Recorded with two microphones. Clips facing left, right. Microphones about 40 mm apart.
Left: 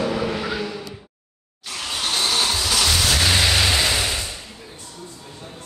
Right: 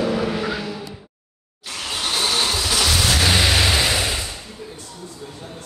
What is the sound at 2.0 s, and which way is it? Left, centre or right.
Vehicle, centre.